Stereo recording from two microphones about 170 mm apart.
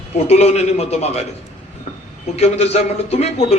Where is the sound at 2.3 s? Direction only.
35° left (ahead or behind).